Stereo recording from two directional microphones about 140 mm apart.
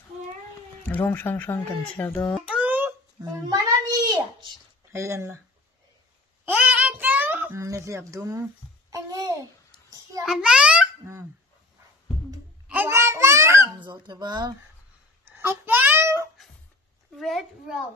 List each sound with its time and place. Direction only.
0.8 s speech: 10° left (ahead or behind)
2.4 s a sound: 10° right (ahead or behind)
3.2 s a sound: 25° right (ahead or behind)
4.9 s speech: 20° right (ahead or behind)
6.5 s child singing: 10° right (ahead or behind)
8.9 s babbling: 25° right (ahead or behind)
10.2 s a child's voice: 5° right (ahead or behind)
12.6 s a sound: 15° right (ahead or behind)
13.8 s speech: 30° right (ahead or behind)
15.2 s babbling: 15° right (ahead or behind)
17.1 s a child's voice: centre (ahead or behind)